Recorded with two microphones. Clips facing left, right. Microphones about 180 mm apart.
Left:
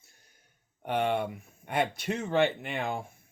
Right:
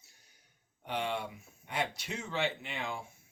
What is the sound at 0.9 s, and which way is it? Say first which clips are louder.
Speech: left 7 dB; 55° left (ahead or behind).